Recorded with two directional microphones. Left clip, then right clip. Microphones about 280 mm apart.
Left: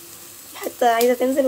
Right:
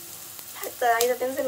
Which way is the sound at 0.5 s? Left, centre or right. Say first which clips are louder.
Left 5 dB; left.